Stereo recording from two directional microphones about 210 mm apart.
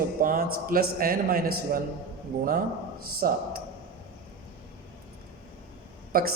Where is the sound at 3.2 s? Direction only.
40° right (ahead or behind).